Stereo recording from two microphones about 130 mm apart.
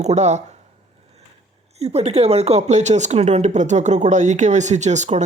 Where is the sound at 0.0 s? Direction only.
60° right (ahead or behind).